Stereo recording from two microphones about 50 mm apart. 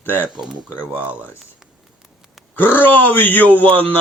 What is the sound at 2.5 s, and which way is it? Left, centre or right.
Speech, left.